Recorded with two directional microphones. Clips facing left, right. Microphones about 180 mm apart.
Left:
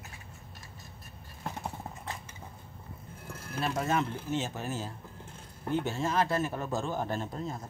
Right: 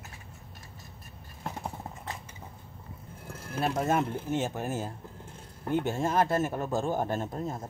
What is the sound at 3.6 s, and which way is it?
A man's voice, 50° right (ahead or behind).